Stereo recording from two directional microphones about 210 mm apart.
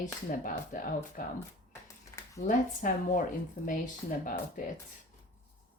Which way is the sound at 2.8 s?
40° left (ahead or behind).